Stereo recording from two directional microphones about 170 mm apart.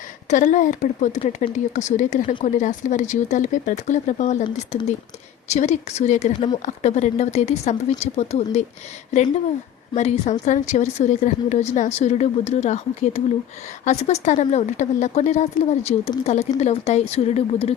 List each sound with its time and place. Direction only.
0.3 s a woman's voice: 45° left (ahead or behind)
9.9 s a woman's voice: 45° left (ahead or behind)